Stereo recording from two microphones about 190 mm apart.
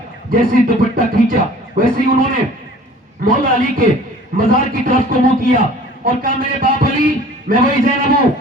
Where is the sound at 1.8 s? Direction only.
50° right (ahead or behind).